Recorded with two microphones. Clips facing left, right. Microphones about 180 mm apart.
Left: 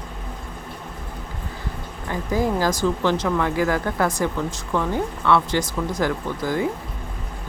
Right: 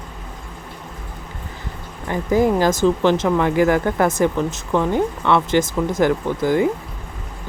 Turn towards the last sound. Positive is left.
turn(degrees=-20)  # may be behind; listen again after turning